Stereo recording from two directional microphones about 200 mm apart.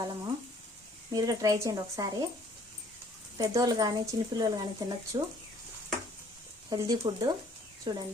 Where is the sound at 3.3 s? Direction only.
20° right (ahead or behind).